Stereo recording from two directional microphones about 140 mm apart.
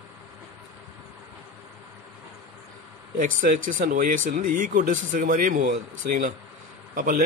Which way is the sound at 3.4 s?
65° right (ahead or behind).